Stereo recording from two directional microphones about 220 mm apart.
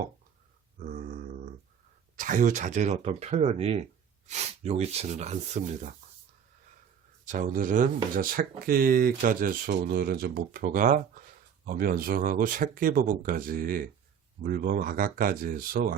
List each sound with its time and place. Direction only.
0.9 s grunt: 35° right (ahead or behind)
2.1 s speech: 35° right (ahead or behind)
7.3 s speech: 35° right (ahead or behind)